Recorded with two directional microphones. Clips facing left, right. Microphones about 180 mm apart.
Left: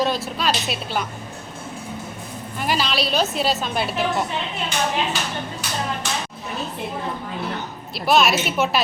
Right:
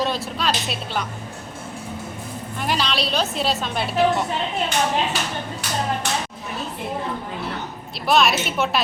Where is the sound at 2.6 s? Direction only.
5° left (ahead or behind).